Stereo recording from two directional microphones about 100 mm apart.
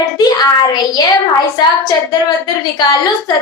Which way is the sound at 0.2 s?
40° left (ahead or behind).